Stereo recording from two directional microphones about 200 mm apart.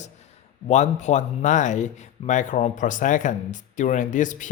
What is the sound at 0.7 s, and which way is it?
Speech, 35° left (ahead or behind).